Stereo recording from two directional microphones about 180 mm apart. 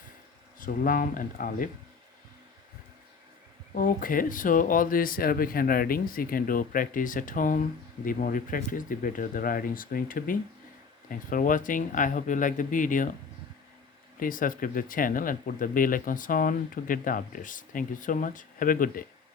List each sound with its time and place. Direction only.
0.6 s speech: 50° left (ahead or behind)
3.8 s speech: 50° left (ahead or behind)
14.2 s speech: 50° left (ahead or behind)